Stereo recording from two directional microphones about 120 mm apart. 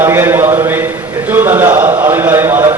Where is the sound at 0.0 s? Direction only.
15° right (ahead or behind).